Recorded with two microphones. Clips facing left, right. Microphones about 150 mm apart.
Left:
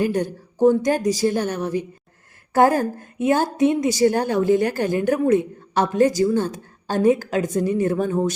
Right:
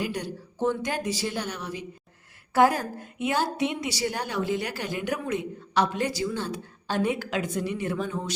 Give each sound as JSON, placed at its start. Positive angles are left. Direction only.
{"t": 0.0, "sound": "a woman's voice", "side_deg": 50}